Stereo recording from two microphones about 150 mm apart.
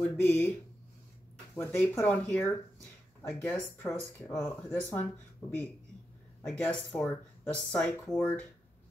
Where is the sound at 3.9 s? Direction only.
5° left (ahead or behind).